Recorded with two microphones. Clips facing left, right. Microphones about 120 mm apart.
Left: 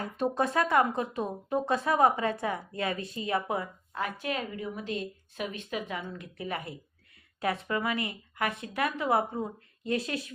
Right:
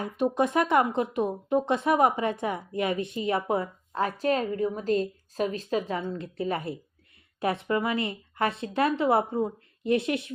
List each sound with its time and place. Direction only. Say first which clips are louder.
0.3 s speech: right 2 dB; 20° right (ahead or behind)